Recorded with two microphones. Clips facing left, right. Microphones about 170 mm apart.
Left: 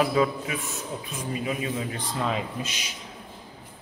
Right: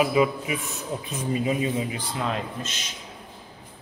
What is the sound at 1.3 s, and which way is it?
Speech, 25° right (ahead or behind).